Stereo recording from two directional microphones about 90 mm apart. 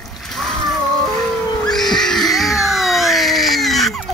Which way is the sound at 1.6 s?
5° left (ahead or behind).